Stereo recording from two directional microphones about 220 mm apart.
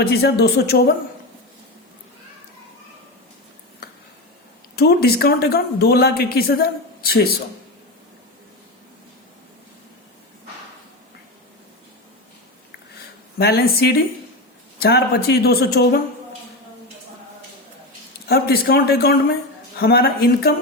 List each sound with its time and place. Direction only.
0.0 s speech: 50° left (ahead or behind)
4.7 s speech: 45° left (ahead or behind)
13.4 s speech: 45° left (ahead or behind)
18.3 s speech: 45° left (ahead or behind)